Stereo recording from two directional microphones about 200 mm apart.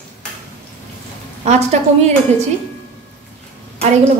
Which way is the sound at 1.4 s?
35° right (ahead or behind).